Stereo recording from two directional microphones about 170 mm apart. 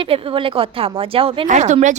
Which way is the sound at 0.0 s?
30° right (ahead or behind).